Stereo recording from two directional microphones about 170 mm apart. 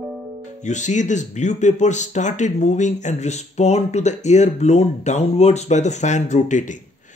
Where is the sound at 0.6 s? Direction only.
45° left (ahead or behind).